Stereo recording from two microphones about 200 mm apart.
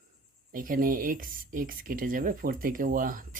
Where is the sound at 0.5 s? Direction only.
45° right (ahead or behind).